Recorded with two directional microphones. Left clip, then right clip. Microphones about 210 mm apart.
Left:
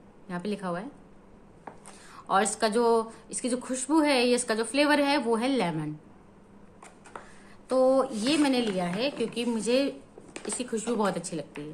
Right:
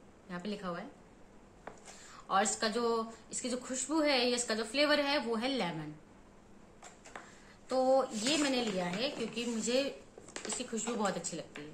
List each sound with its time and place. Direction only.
0.3 s a woman's voice: 50° left (ahead or behind)
2.1 s a woman's voice: 50° left (ahead or behind)
7.6 s a woman's voice: 50° left (ahead or behind)